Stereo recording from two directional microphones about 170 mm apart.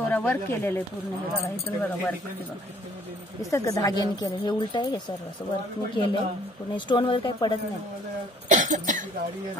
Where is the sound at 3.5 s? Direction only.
20° left (ahead or behind).